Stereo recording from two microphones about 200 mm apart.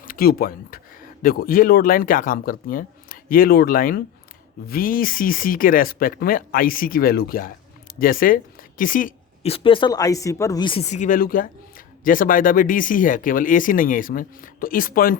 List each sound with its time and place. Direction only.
0.0 s speech: 45° left (ahead or behind)
8.8 s a sound: 45° left (ahead or behind)
9.5 s speech: 25° left (ahead or behind); by 15.2 s 45° left (ahead or behind)